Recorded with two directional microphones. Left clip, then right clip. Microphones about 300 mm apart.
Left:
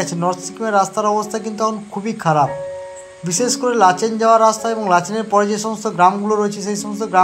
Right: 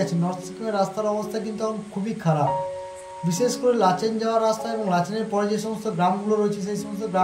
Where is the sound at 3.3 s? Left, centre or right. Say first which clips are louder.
Left 3 dB; centre.